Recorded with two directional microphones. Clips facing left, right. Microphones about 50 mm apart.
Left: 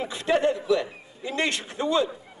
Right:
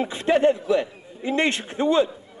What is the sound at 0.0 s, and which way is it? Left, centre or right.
A man's voice, right.